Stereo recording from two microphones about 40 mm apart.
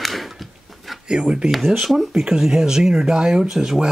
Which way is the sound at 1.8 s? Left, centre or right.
Centre.